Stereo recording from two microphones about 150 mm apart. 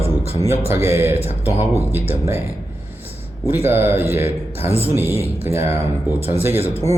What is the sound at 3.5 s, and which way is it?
Speech, 15° right (ahead or behind).